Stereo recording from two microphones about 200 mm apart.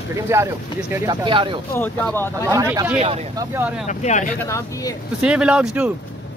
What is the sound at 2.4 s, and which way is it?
Speech, 15° right (ahead or behind).